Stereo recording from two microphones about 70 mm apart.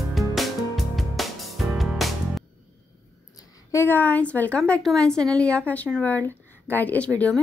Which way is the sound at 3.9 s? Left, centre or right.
Left.